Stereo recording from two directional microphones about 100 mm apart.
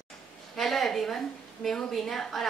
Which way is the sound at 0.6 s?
Centre (ahead or behind).